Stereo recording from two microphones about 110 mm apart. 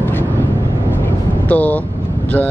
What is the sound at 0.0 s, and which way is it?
Vehicle, 15° left (ahead or behind).